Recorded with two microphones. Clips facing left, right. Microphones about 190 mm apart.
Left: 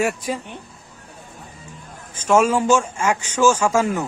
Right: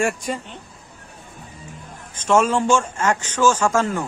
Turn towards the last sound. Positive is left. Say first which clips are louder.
# left 1 dB
turn(degrees=10)  # may be behind; listen again after turning